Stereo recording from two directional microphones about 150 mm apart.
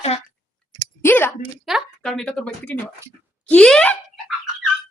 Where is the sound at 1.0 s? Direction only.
15° left (ahead or behind).